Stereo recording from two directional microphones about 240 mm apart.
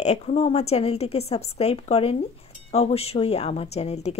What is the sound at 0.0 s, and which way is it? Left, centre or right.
A woman's voice, left.